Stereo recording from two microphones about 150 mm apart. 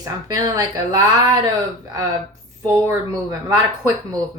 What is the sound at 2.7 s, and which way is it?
Speech, 20° right (ahead or behind).